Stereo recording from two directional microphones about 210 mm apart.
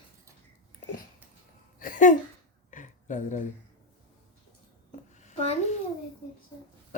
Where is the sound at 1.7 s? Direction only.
40° left (ahead or behind).